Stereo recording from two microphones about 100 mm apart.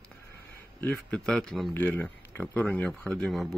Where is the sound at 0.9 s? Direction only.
5° left (ahead or behind).